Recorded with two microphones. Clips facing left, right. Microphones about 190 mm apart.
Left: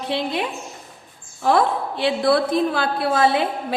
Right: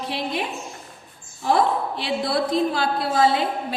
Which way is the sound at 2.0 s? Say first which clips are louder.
Left 8 dB; 60° left (ahead or behind).